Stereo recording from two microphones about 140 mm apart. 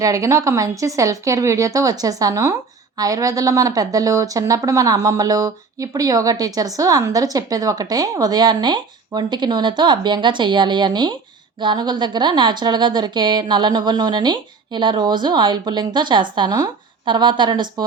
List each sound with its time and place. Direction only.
0.0 s speech: 25° right (ahead or behind)